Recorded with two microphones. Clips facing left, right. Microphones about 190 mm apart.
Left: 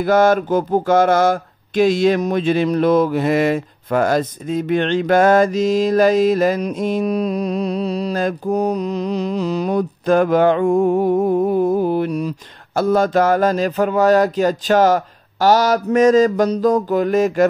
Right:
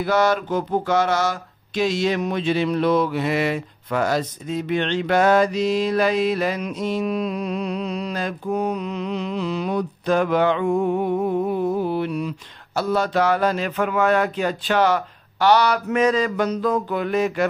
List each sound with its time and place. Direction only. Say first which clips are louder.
0.0 s speech: left 5 dB; 50° left (ahead or behind)